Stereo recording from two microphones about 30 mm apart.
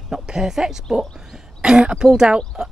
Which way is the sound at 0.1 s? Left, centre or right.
Centre.